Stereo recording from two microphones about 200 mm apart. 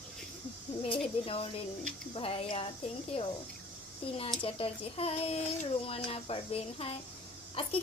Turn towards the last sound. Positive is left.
turn(degrees=25)  # may be behind; listen again after turning